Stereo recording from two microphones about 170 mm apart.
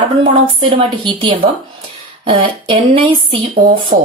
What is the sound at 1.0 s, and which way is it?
A woman's voice, 30° right (ahead or behind).